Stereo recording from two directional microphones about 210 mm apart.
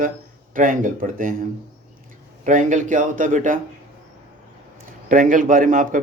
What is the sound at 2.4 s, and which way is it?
A man's voice, 35° right (ahead or behind).